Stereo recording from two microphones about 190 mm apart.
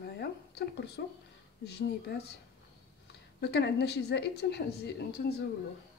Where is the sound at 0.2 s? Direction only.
60° left (ahead or behind).